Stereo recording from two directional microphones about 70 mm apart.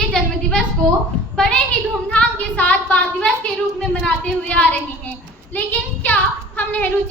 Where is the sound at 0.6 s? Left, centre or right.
Centre.